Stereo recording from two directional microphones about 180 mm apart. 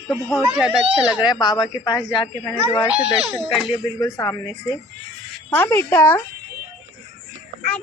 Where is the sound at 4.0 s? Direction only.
15° left (ahead or behind).